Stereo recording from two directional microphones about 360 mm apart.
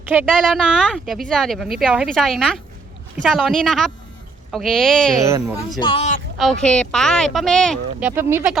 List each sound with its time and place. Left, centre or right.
0.0 s speech: centre
5.8 s speech: centre
6.3 s speech: centre